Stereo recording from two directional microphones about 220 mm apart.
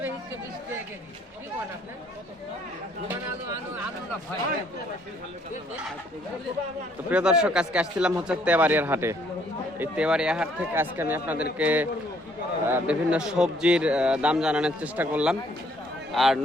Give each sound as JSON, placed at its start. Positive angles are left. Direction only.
{"t": 7.1, "sound": "a man's voice", "side_deg": -5}